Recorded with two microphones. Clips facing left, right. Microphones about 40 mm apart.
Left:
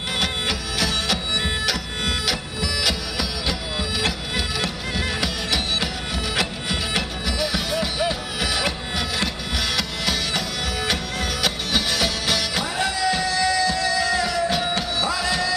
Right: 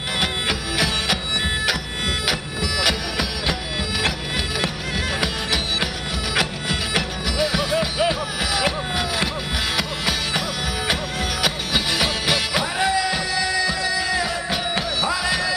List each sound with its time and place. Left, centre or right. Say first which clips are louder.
0.2 s music: right 2 dB; centre
4.6 s music: right 1 dB; centre
7.3 s music: right 4 dB; right
8.6 s music: right 3 dB; centre